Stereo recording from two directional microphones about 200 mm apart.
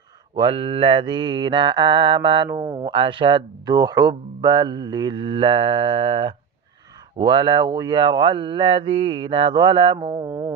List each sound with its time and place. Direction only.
0.3 s mantra: 25° right (ahead or behind)